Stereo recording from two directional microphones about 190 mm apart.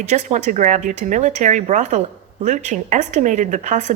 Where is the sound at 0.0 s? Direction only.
40° right (ahead or behind).